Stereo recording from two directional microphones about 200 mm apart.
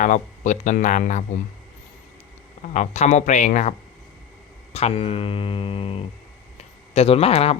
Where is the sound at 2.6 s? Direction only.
35° left (ahead or behind).